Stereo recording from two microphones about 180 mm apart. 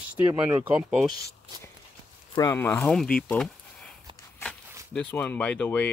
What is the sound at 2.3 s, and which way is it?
Speech, 15° left (ahead or behind).